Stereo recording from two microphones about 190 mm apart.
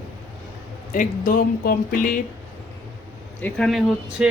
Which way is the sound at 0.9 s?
45° left (ahead or behind).